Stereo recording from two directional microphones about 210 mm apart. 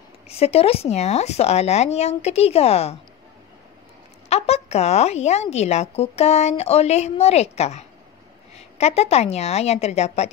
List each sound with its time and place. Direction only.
0.4 s speech: 30° left (ahead or behind)
4.3 s speech: 30° left (ahead or behind)